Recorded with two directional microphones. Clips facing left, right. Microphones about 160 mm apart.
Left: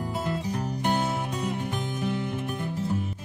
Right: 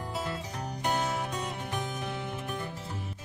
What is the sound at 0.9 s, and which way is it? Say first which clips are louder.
Music: left 3 dB; 25° left (ahead or behind).